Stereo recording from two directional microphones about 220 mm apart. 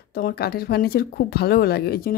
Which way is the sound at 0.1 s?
45° left (ahead or behind).